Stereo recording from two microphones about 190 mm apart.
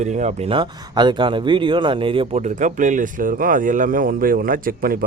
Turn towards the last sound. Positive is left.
turn(degrees=-50)  # may be behind; listen again after turning